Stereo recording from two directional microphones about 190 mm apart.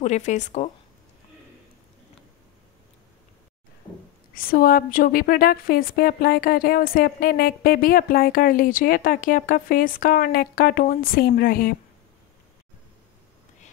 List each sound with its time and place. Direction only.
0.0 s a woman's voice: 40° left (ahead or behind)
4.3 s a woman's voice: 50° left (ahead or behind)